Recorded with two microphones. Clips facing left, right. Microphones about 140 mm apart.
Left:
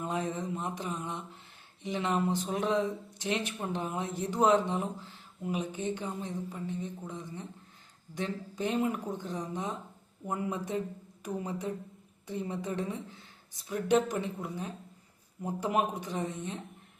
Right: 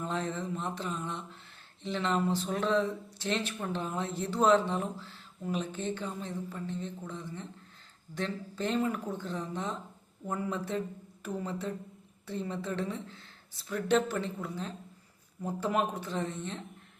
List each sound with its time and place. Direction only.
0.0 s speech: 15° left (ahead or behind)